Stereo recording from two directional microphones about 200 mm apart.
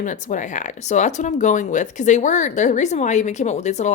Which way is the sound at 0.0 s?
40° left (ahead or behind).